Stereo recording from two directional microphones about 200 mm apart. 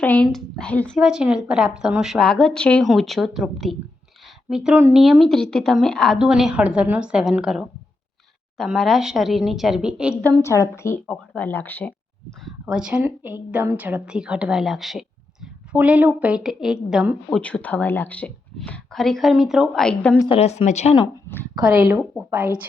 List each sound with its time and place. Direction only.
0.0 s speech: 5° left (ahead or behind)
10.6 s speech: 10° left (ahead or behind)
12.5 s speech: 5° right (ahead or behind)
17.3 s speech: 5° left (ahead or behind)
20.1 s speech: 25° left (ahead or behind)
21.8 s speech: 10° right (ahead or behind)